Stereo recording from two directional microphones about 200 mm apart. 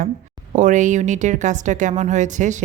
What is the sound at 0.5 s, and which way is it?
Speech, 40° right (ahead or behind).